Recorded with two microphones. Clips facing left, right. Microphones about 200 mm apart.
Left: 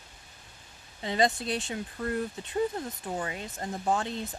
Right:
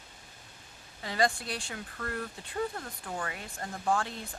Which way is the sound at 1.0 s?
20° left (ahead or behind).